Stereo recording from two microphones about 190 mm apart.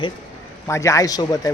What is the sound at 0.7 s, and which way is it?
Speech, 15° left (ahead or behind).